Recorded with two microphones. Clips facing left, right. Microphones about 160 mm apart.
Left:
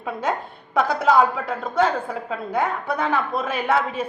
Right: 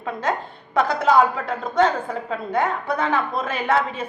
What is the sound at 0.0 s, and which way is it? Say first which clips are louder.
A woman's voice: even; 10° left (ahead or behind).